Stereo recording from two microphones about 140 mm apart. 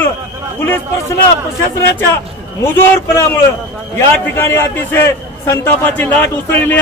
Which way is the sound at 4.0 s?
15° left (ahead or behind).